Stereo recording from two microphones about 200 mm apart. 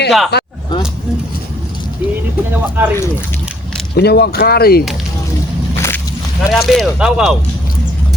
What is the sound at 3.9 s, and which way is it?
Speech, 55° left (ahead or behind).